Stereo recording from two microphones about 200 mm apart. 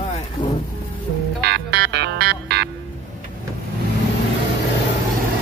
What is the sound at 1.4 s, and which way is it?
Music, 55° right (ahead or behind).